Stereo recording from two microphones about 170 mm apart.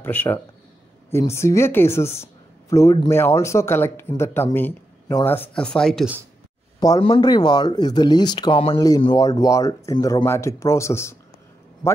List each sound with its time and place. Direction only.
0.0 s speech: 10° left (ahead or behind)
7.0 s speech: 30° left (ahead or behind)